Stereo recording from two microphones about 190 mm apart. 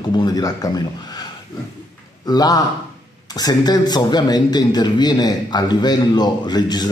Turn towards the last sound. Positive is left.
turn(degrees=20)  # may be behind; listen again after turning